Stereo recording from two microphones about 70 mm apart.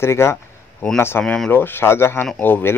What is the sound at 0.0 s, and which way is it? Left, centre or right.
Speech, left.